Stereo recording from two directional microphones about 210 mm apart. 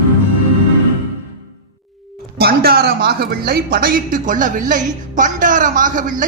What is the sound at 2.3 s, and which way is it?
Speech, 45° right (ahead or behind).